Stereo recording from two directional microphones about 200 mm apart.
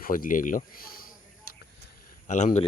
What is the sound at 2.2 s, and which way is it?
Speech, 35° left (ahead or behind).